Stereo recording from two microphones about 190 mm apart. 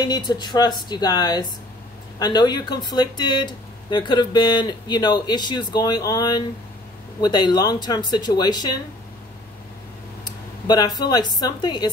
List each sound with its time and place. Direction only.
0.0 s speech: 20° left (ahead or behind)
10.2 s a sound: 20° left (ahead or behind)
11.0 s speech: 20° left (ahead or behind)